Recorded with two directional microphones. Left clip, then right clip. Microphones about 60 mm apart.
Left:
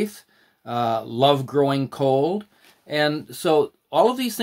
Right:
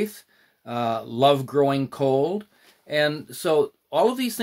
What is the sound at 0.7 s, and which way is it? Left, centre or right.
Speech, left.